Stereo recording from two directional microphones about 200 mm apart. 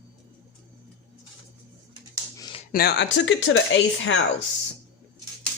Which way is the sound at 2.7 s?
55° left (ahead or behind).